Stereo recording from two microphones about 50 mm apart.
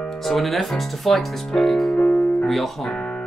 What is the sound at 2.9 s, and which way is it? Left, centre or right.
Music, left.